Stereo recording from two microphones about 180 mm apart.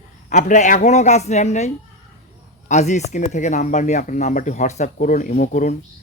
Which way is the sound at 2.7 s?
40° left (ahead or behind).